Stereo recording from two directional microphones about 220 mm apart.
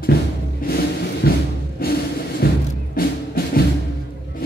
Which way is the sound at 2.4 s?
45° left (ahead or behind).